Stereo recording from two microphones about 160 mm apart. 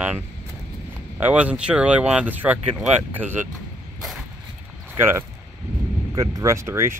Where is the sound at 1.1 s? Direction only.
10° right (ahead or behind).